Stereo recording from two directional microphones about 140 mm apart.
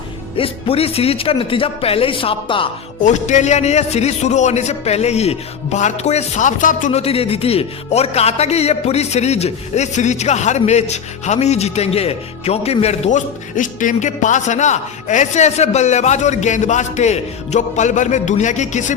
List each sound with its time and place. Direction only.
0.3 s speech: 40° left (ahead or behind)
3.0 s a man's voice: 60° left (ahead or behind)
7.0 s a man's voice: 45° left (ahead or behind)